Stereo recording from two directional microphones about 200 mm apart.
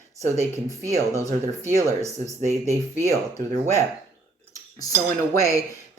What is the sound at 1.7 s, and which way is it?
Speech, 15° right (ahead or behind).